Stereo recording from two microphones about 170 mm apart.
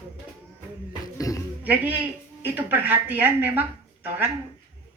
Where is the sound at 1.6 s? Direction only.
10° right (ahead or behind).